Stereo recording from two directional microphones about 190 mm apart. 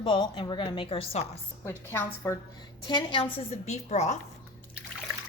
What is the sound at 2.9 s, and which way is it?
Speech, 25° left (ahead or behind).